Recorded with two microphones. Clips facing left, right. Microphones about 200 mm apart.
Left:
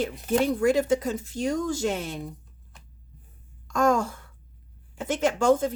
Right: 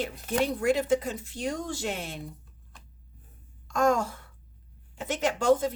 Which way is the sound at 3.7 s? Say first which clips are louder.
Left 2 dB; 45° left (ahead or behind).